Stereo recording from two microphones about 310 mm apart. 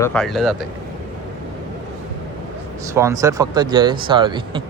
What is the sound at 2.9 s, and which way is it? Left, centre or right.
Speech, centre.